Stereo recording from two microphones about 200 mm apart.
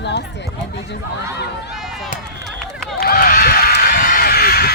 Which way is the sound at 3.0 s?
50° left (ahead or behind).